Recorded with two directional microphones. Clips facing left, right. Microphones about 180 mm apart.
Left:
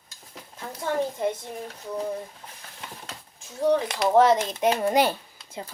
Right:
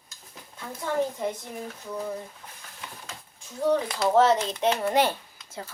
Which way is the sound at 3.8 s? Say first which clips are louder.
Left 2 dB; 20° left (ahead or behind).